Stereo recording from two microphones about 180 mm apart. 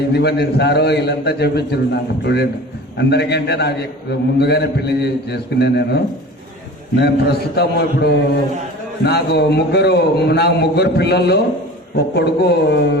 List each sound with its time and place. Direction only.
0.1 s a man's voice: 65° left (ahead or behind)